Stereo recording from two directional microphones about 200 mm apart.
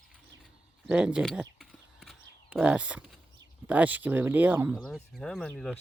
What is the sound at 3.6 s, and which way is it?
Speech, 10° right (ahead or behind).